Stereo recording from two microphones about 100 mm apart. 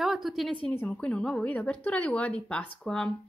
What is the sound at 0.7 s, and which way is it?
Speech, 15° left (ahead or behind).